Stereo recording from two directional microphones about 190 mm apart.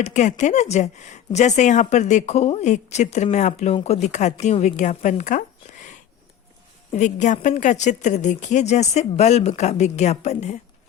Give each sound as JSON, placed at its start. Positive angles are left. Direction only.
{"t": 0.0, "sound": "a woman's voice", "side_deg": 40}
{"t": 6.9, "sound": "a woman's voice", "side_deg": 40}